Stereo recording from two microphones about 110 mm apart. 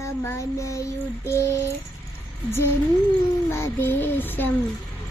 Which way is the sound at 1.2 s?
25° left (ahead or behind).